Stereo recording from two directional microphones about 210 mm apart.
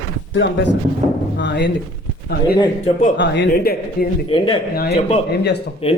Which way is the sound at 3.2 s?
50° left (ahead or behind).